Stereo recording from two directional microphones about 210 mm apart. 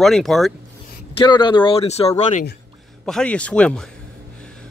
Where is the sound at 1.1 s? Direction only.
20° left (ahead or behind).